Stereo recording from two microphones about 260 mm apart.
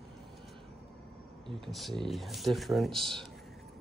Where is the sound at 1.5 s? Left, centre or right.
Centre.